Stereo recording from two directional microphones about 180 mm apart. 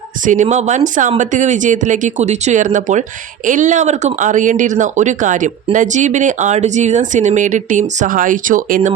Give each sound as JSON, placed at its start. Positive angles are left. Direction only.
{"t": 0.3, "sound": "speech", "side_deg": -40}